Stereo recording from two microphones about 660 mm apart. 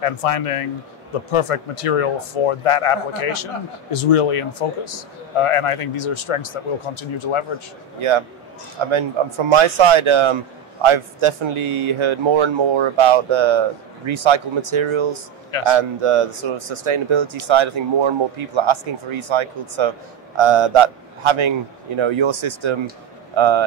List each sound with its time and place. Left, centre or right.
0.0 s speech: left
8.8 s a man's voice: right